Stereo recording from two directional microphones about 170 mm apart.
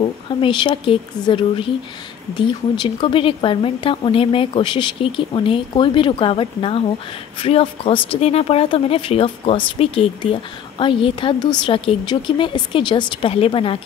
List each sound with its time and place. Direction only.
0.0 s a woman's voice: 30° left (ahead or behind)